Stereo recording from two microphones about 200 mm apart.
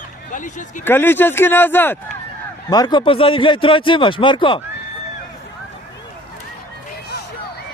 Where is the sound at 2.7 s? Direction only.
20° left (ahead or behind).